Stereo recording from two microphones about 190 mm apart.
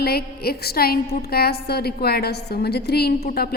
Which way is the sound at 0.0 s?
55° left (ahead or behind).